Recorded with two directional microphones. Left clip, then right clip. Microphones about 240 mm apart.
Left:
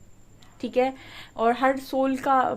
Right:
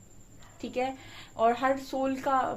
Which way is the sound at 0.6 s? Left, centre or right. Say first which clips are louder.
Left 8 dB; left.